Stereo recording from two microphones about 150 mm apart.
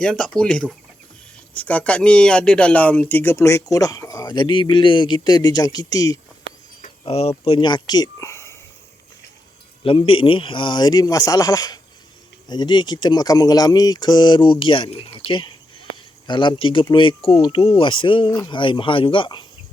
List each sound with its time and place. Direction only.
0.0 s speech: 5° left (ahead or behind); by 6.1 s 25° left (ahead or behind)
7.0 s speech: 40° left (ahead or behind); by 8.5 s 20° left (ahead or behind)
10.1 s speech: 35° left (ahead or behind)
18.3 s speech: 25° left (ahead or behind)